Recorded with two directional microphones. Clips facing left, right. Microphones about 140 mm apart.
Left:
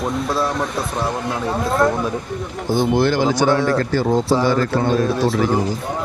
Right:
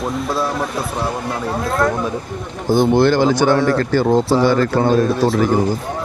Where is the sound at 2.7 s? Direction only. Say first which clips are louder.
Right 4 dB; 55° right (ahead or behind).